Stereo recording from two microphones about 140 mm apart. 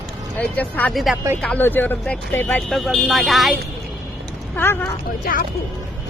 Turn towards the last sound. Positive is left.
turn(degrees=90)